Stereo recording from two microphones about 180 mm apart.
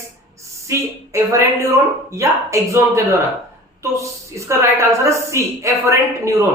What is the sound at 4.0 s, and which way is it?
A woman's voice, 15° right (ahead or behind).